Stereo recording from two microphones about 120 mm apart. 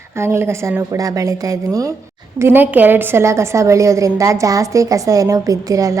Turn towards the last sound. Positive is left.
turn(degrees=-30)  # may be behind; listen again after turning